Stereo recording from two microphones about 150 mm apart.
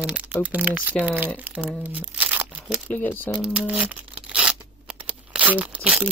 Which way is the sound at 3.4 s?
5° right (ahead or behind).